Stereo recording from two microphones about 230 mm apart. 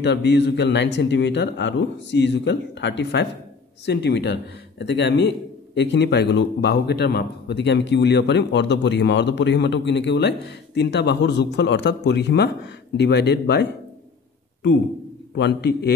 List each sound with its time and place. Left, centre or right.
0.0 s a man's voice: left
15.3 s a man's voice: left